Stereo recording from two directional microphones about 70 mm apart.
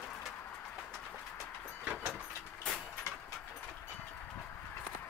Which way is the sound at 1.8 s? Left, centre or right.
Centre.